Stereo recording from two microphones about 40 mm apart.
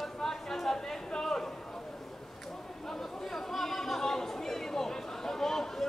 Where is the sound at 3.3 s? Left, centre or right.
Centre.